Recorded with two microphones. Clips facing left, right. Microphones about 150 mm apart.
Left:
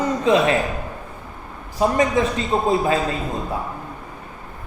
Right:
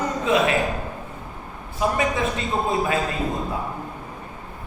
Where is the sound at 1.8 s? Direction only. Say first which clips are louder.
Left 4 dB; 30° left (ahead or behind).